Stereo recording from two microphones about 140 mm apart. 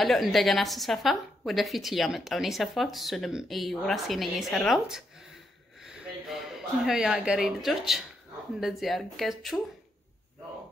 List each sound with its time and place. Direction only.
0.0 s a woman's voice: centre (ahead or behind)